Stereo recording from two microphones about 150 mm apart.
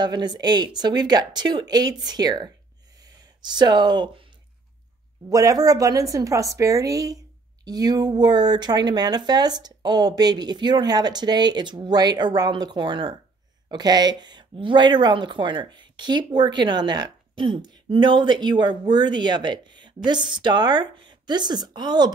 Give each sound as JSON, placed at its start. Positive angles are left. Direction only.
{"t": 0.0, "sound": "speech", "side_deg": -30}
{"t": 5.3, "sound": "speech", "side_deg": -25}